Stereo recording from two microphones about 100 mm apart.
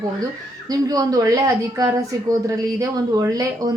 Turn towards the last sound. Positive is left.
turn(degrees=-40)  # may be behind; listen again after turning